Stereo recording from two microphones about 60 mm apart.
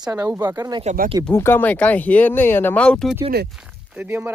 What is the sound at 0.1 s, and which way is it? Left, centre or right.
Speech, right.